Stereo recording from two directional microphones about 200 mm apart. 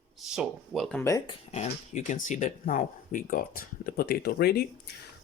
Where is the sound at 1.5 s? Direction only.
35° left (ahead or behind).